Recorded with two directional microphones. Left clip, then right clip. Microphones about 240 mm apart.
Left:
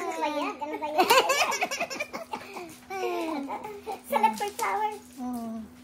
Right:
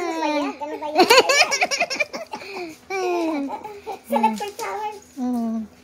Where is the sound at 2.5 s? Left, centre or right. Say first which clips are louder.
Right 11 dB; right.